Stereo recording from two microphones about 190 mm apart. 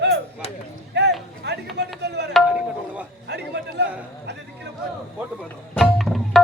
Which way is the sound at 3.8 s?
60° right (ahead or behind).